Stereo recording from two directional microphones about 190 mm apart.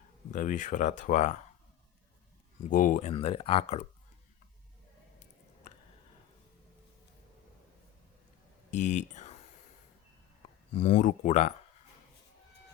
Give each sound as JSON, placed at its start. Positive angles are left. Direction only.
{"t": 0.3, "sound": "speech", "side_deg": 40}
{"t": 2.6, "sound": "speech", "side_deg": 45}
{"t": 3.1, "sound": "speech", "side_deg": 30}
{"t": 8.7, "sound": "speech", "side_deg": 40}
{"t": 10.8, "sound": "speech", "side_deg": 40}